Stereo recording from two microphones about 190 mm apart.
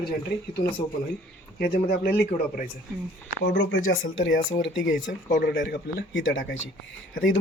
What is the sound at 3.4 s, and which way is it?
Speech, 85° left.